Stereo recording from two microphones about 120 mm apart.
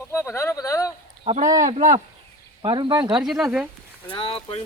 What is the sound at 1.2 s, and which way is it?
Speech, 70° right (ahead or behind).